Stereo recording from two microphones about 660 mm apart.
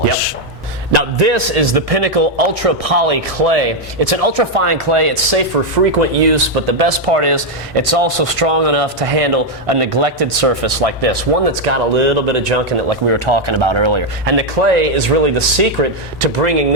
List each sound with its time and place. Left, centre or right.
0.9 s speech: right
5.5 s speech: right
6.0 s speech: right
11.6 s speech: right
13.1 s speech: right
14.3 s speech: right